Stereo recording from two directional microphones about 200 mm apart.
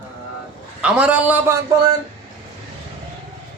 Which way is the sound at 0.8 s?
5° right (ahead or behind).